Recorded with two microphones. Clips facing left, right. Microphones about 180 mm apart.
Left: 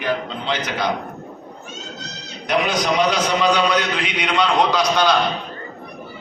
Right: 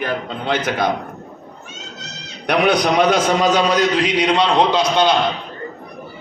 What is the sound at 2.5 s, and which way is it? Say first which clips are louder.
A man's voice: right 4 dB; 60° right (ahead or behind).